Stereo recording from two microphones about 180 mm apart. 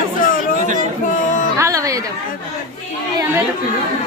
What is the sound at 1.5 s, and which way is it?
Speech, 15° right (ahead or behind).